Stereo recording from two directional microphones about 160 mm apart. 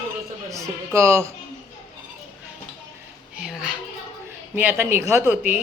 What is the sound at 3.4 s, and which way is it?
A child's voice, 5° right (ahead or behind).